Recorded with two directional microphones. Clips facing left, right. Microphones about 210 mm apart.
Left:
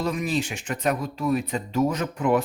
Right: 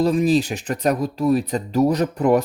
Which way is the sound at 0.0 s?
35° right (ahead or behind).